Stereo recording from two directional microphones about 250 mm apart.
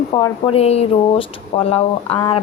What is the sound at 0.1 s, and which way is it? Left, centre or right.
Speech, centre.